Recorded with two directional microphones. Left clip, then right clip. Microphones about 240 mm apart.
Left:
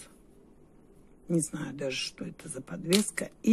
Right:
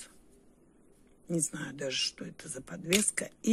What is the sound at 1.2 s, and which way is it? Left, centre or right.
Speech, centre.